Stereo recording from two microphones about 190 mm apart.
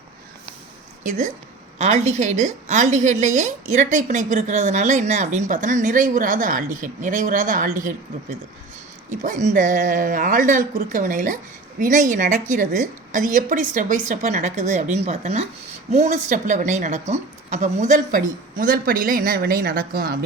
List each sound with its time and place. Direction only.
1.0 s a woman's voice: 40° right (ahead or behind)
9.2 s a woman's voice: 40° right (ahead or behind)